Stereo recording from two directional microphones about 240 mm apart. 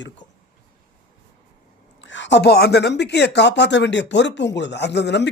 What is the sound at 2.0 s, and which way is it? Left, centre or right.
Speech, left.